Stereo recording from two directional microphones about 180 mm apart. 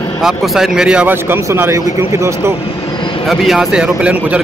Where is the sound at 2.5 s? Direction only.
35° left (ahead or behind).